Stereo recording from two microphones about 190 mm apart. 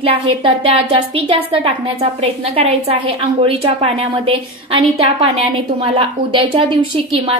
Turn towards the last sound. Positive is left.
turn(degrees=-30)  # may be behind; listen again after turning